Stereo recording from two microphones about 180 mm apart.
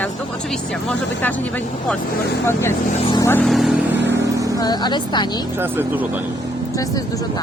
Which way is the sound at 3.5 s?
Centre (ahead or behind).